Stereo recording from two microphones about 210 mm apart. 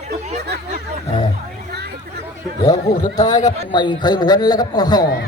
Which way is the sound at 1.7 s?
50° right (ahead or behind).